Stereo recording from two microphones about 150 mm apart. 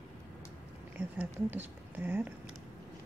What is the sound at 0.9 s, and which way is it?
Speech, 10° right (ahead or behind).